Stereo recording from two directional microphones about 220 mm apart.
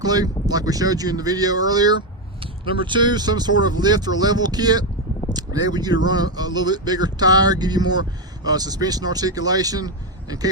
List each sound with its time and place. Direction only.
0.0 s speech: 15° right (ahead or behind)